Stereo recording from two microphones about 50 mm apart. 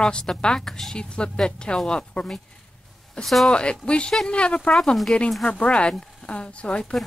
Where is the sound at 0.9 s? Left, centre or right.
Centre.